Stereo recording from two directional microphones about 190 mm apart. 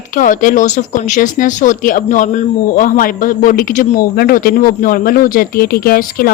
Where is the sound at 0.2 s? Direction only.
45° left (ahead or behind).